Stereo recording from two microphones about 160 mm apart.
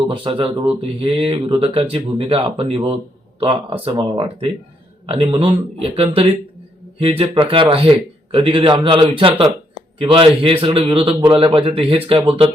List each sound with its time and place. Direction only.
0.1 s speech: 35° right (ahead or behind)